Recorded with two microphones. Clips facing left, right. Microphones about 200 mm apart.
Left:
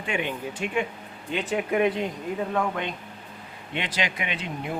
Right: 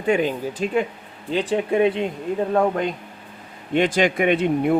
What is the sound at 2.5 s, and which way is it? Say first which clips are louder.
Speech: right 7 dB; 40° right (ahead or behind).